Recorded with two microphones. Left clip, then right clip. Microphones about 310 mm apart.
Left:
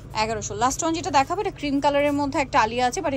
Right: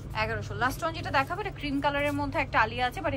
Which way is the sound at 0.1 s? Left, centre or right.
Centre.